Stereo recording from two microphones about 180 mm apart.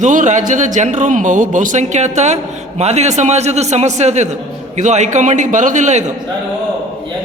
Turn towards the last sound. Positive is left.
turn(degrees=-40)  # may be behind; listen again after turning